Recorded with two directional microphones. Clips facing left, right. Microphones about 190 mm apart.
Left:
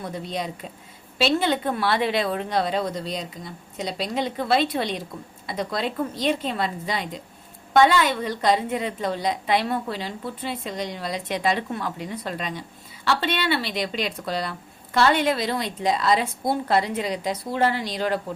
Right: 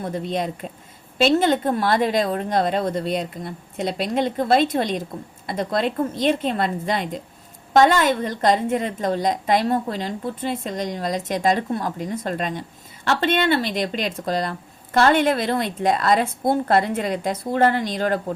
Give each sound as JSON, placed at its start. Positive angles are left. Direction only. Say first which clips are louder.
{"t": 0.0, "sound": "a woman's voice", "louder": "right 5 dB", "side_deg": -50}